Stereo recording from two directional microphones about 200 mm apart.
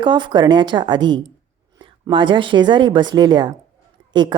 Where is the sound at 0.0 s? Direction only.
25° right (ahead or behind).